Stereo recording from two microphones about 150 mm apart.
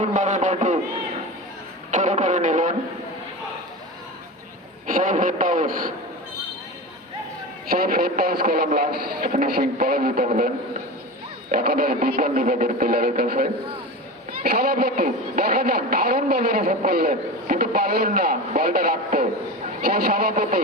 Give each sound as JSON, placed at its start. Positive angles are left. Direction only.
{"t": 0.0, "sound": "a man's voice", "side_deg": -55}
{"t": 1.9, "sound": "a man's voice", "side_deg": -55}
{"t": 4.9, "sound": "a man's voice", "side_deg": -65}
{"t": 7.7, "sound": "speech", "side_deg": -90}
{"t": 10.2, "sound": "a man's voice", "side_deg": -60}
{"t": 11.5, "sound": "speech", "side_deg": -85}
{"t": 14.8, "sound": "a woman's voice", "side_deg": -85}